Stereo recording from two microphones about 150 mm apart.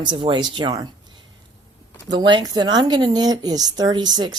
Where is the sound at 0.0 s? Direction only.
30° right (ahead or behind).